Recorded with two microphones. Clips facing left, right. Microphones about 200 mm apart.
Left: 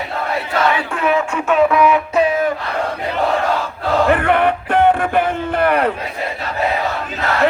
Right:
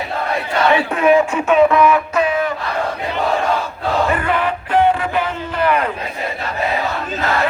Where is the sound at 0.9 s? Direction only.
15° right (ahead or behind).